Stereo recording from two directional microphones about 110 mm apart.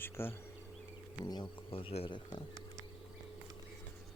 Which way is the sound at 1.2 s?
40° left (ahead or behind).